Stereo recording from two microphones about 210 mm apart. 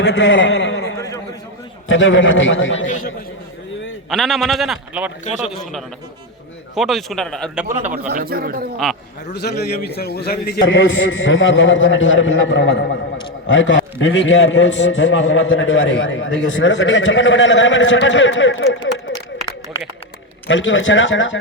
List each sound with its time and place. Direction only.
0.0 s a man's voice: 60° left (ahead or behind)
0.9 s a sound: 15° left (ahead or behind)
1.9 s a man's voice: 65° left (ahead or behind)
2.8 s a man's voice: 40° left (ahead or behind)
4.1 s a man's voice: centre (ahead or behind)
6.7 s a man's voice: centre (ahead or behind)
8.1 s a man's voice: 45° right (ahead or behind)
8.8 s a man's voice: 5° left (ahead or behind)
9.3 s a man's voice: 50° left (ahead or behind)
20.5 s a man's voice: 65° left (ahead or behind)